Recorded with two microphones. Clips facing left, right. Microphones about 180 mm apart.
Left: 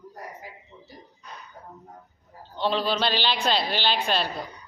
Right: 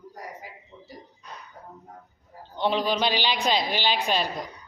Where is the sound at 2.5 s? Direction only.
15° right (ahead or behind).